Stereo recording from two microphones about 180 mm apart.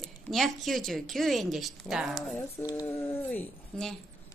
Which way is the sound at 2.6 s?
20° left (ahead or behind).